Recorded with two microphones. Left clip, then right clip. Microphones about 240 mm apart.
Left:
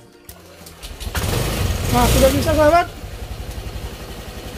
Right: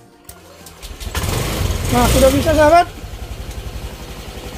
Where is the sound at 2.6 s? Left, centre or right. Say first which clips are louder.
Right 3 dB; right.